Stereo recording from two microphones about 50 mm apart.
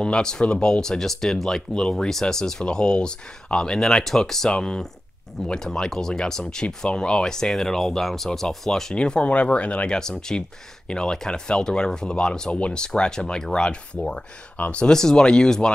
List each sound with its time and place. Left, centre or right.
0.0 s speech: centre
8.9 s speech: centre
9.9 s speech: centre
14.9 s speech: centre